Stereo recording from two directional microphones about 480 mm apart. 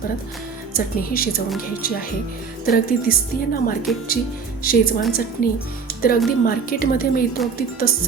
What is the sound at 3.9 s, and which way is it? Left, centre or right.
Speech, centre.